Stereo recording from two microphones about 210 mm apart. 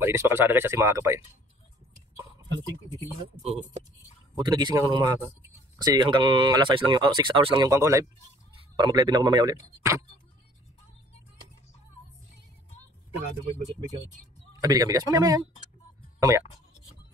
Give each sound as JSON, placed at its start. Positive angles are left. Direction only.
{"t": 0.0, "sound": "speech", "side_deg": -10}
{"t": 4.4, "sound": "speech", "side_deg": -20}
{"t": 14.5, "sound": "speech", "side_deg": -15}